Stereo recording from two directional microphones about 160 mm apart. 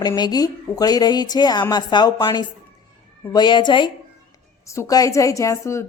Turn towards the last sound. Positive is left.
turn(degrees=20)  # may be behind; listen again after turning